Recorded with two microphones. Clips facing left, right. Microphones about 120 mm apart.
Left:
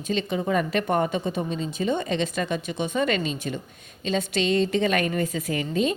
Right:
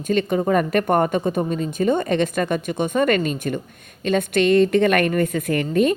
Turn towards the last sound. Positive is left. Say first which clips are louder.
# right 6 dB
turn(degrees=-55)  # may be behind; listen again after turning